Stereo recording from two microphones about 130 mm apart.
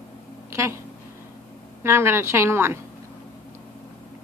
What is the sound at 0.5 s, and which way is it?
Speech, 20° right (ahead or behind).